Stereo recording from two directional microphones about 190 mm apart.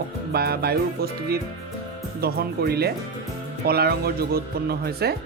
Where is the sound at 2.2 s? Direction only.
55° right (ahead or behind).